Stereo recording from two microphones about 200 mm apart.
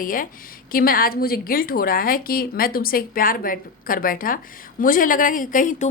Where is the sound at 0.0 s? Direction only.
45° left (ahead or behind).